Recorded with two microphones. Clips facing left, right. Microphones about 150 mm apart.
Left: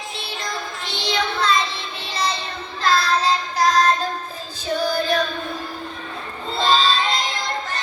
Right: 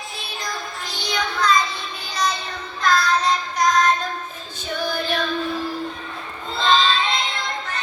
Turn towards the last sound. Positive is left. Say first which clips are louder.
# even
turn(degrees=35)  # may be behind; listen again after turning